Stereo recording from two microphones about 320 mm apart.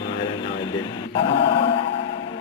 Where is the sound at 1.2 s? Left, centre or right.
Centre.